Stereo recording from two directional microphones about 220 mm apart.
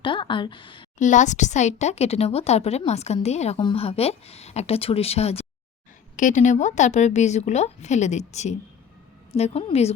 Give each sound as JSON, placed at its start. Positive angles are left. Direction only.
{"t": 0.0, "sound": "a woman's voice", "side_deg": 20}
{"t": 0.9, "sound": "a woman's voice", "side_deg": 35}